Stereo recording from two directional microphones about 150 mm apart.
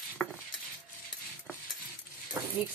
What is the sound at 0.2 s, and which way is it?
Cutlery, 10° left (ahead or behind).